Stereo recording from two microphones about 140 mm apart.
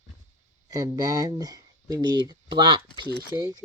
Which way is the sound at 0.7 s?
25° right (ahead or behind).